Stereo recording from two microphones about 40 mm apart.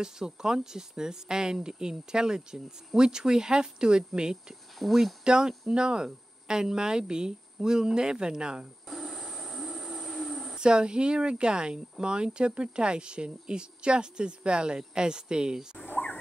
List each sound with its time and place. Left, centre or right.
0.0 s speech: centre
4.8 s speech: centre
5.2 s a sound: centre
5.7 s speech: right
8.8 s a sound: centre
10.5 s speech: right